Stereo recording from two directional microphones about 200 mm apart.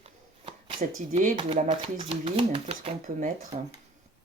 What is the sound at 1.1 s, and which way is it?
Speech, 40° right (ahead or behind).